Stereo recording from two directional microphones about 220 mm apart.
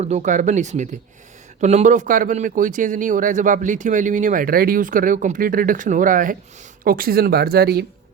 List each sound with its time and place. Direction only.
0.0 s speech: 30° right (ahead or behind)